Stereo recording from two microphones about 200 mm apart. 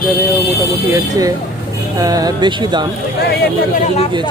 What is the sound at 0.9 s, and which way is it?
Speech, 15° right (ahead or behind).